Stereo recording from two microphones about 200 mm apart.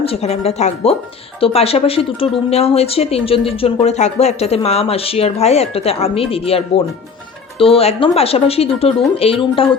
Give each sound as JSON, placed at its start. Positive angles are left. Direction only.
{"t": 0.0, "sound": "speech", "side_deg": 30}